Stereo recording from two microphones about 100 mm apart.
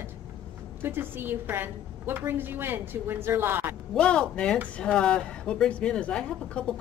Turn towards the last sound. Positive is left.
turn(degrees=10)  # may be behind; listen again after turning